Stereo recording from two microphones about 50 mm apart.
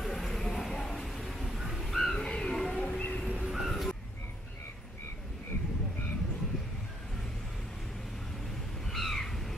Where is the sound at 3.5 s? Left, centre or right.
Centre.